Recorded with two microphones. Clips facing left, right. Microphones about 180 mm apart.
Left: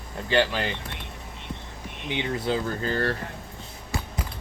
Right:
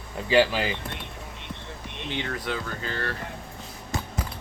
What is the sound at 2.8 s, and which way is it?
Speech, 40° left (ahead or behind).